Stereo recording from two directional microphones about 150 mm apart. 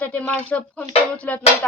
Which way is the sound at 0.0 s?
10° left (ahead or behind).